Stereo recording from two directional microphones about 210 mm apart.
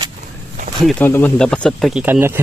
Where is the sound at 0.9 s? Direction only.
10° left (ahead or behind); by 2.4 s 10° right (ahead or behind).